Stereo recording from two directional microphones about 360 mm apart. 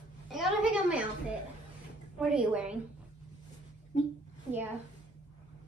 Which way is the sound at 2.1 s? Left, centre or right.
Centre.